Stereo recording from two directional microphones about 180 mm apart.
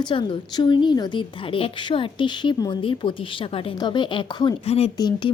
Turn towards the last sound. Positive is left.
turn(degrees=25)  # may be behind; listen again after turning